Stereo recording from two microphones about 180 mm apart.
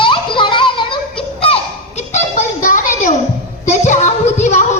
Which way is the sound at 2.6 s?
45° left (ahead or behind).